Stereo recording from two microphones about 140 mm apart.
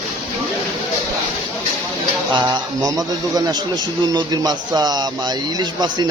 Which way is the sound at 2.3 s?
30° right (ahead or behind).